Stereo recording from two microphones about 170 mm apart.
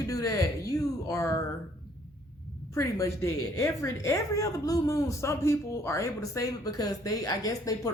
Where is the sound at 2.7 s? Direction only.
15° left (ahead or behind).